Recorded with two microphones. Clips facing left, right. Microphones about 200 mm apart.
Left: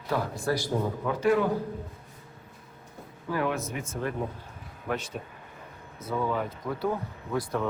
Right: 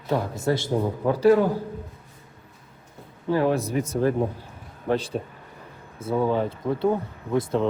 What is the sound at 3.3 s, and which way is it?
Speech, 35° right (ahead or behind).